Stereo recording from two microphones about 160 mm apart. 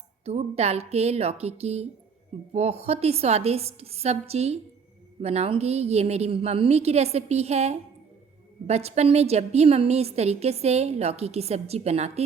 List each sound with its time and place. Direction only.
0.3 s a woman's voice: 40° right (ahead or behind)